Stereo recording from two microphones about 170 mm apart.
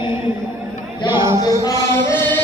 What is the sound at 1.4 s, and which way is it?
Music, 20° left (ahead or behind).